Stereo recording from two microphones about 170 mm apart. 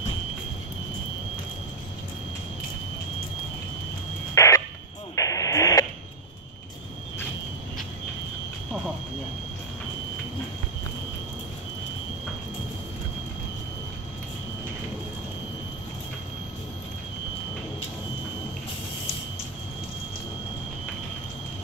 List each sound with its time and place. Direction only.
4.4 s radio: 20° left (ahead or behind)